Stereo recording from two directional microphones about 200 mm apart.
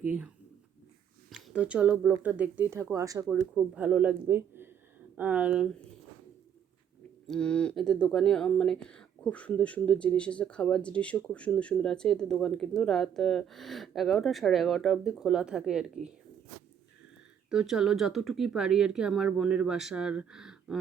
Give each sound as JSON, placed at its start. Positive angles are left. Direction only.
{"t": 0.0, "sound": "speech", "side_deg": -5}
{"t": 1.3, "sound": "speech", "side_deg": -5}
{"t": 3.2, "sound": "speech", "side_deg": -5}
{"t": 7.3, "sound": "speech", "side_deg": 5}
{"t": 17.5, "sound": "speech", "side_deg": -5}